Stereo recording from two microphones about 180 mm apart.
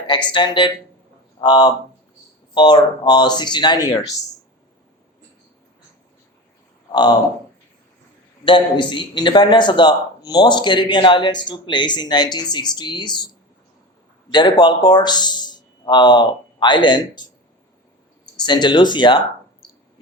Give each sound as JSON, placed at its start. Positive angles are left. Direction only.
{"t": 0.3, "sound": "a man's voice", "side_deg": 25}
{"t": 6.9, "sound": "a man's voice", "side_deg": 25}
{"t": 8.4, "sound": "a man's voice", "side_deg": 25}
{"t": 14.3, "sound": "speech", "side_deg": 25}
{"t": 18.3, "sound": "a man's voice", "side_deg": 25}